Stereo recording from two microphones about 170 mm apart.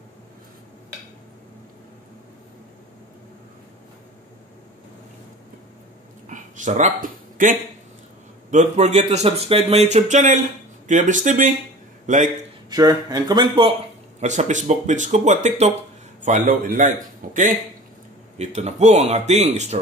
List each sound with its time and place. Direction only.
6.2 s a sound: 50° right (ahead or behind)
8.5 s speech: 45° right (ahead or behind)
12.6 s speech: 20° right (ahead or behind)
14.2 s speech: 45° right (ahead or behind)